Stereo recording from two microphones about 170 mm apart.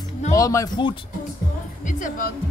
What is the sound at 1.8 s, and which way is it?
Speech, 50° left (ahead or behind).